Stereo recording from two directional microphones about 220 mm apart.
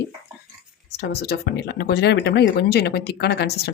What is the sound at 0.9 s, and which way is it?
Speech, 50° left (ahead or behind).